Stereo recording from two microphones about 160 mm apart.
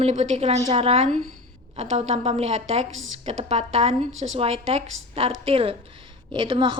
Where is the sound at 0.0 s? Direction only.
45° right (ahead or behind).